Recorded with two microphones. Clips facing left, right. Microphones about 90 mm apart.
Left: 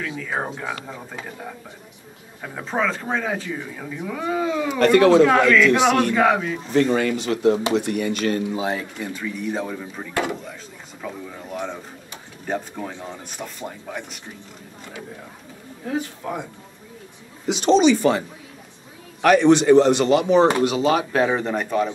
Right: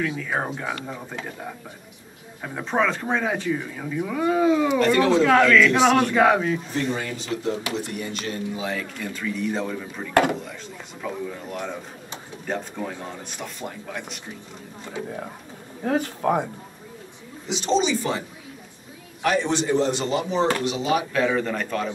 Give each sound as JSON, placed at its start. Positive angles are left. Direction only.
{"t": 0.0, "sound": "speech", "side_deg": 0}
{"t": 4.7, "sound": "speech", "side_deg": 65}
{"t": 5.2, "sound": "speech", "side_deg": 5}
{"t": 5.9, "sound": "speech", "side_deg": 0}
{"t": 6.7, "sound": "speech", "side_deg": 75}
{"t": 8.5, "sound": "speech", "side_deg": 25}
{"t": 9.1, "sound": "speech", "side_deg": 10}
{"t": 12.4, "sound": "speech", "side_deg": 10}
{"t": 15.8, "sound": "speech", "side_deg": -55}
{"t": 17.5, "sound": "speech", "side_deg": 60}
{"t": 19.2, "sound": "speech", "side_deg": 65}
{"t": 20.6, "sound": "speech", "side_deg": 50}
{"t": 20.9, "sound": "speech", "side_deg": 35}
{"t": 21.5, "sound": "speech", "side_deg": 10}